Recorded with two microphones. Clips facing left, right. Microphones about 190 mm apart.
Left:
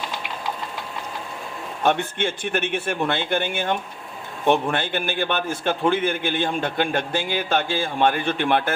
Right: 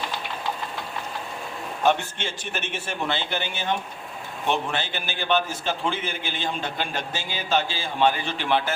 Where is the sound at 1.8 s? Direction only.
55° left (ahead or behind).